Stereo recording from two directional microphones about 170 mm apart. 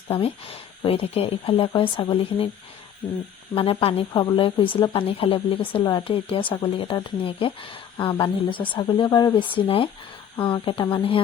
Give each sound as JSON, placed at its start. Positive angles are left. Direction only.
{"t": 0.1, "sound": "speech", "side_deg": 35}
{"t": 3.5, "sound": "speech", "side_deg": 30}